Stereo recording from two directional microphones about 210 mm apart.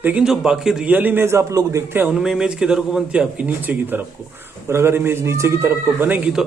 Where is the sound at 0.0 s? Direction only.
5° right (ahead or behind).